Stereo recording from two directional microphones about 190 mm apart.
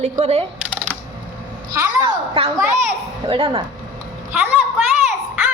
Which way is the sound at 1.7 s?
15° right (ahead or behind).